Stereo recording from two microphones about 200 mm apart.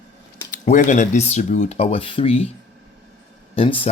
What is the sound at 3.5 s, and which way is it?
Speech, 25° left (ahead or behind).